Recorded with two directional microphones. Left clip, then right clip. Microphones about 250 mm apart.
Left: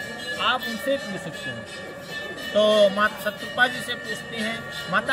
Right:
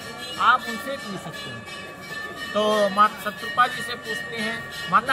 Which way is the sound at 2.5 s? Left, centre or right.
Centre.